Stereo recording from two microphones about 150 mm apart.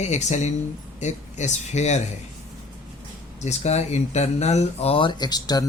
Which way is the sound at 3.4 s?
45° left (ahead or behind).